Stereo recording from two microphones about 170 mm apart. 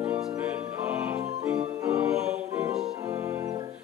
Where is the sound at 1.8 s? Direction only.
10° right (ahead or behind).